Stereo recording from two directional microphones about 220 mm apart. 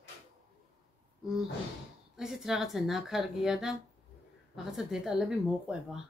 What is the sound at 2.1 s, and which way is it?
Speech, centre (ahead or behind).